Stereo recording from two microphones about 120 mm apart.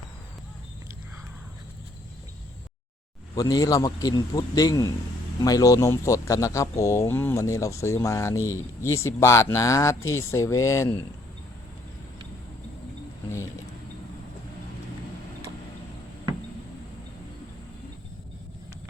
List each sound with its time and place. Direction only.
3.3 s speech: 30° left (ahead or behind)